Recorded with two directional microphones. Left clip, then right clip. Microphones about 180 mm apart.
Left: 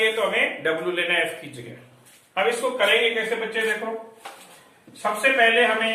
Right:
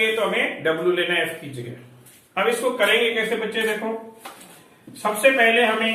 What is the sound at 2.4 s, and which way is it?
A man's voice, 10° left (ahead or behind).